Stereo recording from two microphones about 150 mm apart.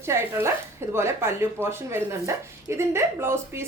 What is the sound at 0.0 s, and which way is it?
A woman's voice, 15° right (ahead or behind).